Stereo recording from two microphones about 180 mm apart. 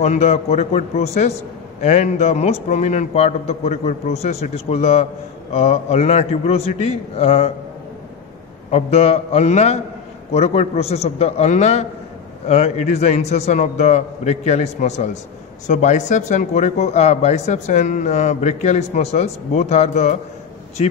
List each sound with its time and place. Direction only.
0.0 s speech: 40° left (ahead or behind)
8.7 s speech: 35° left (ahead or behind)